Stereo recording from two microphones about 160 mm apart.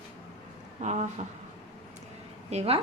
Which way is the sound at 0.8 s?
50° right (ahead or behind).